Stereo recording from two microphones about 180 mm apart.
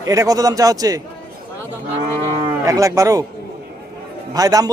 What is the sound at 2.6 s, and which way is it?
Speech, 20° right (ahead or behind).